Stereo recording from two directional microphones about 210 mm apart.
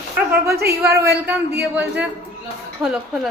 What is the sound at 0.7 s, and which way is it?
A man's voice, 15° right (ahead or behind).